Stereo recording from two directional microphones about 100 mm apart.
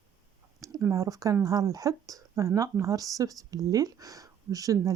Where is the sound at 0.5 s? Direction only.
35° right (ahead or behind).